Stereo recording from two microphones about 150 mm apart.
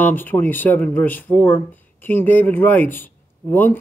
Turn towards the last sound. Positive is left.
turn(degrees=10)  # may be behind; listen again after turning